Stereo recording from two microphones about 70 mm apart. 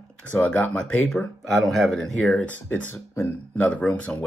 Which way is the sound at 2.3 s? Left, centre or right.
Left.